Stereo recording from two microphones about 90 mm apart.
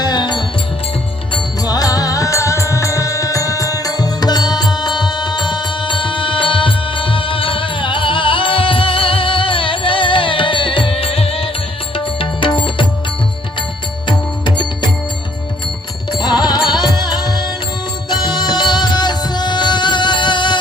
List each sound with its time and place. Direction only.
0.0 s music: 50° left (ahead or behind)
1.6 s music: 45° left (ahead or behind); by 11.4 s 90° left
11.9 s music: 75° left (ahead or behind)
14.1 s music: 60° left (ahead or behind)
16.4 s music: 50° left (ahead or behind)